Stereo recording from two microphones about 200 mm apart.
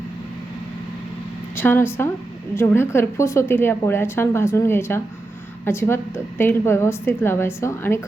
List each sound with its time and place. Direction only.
1.5 s a woman's voice: 10° left (ahead or behind)